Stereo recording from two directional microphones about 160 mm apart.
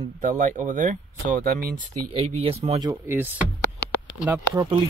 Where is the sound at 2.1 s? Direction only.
35° right (ahead or behind).